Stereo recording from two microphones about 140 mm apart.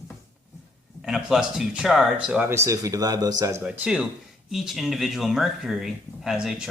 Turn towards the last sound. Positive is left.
turn(degrees=-5)  # may be behind; listen again after turning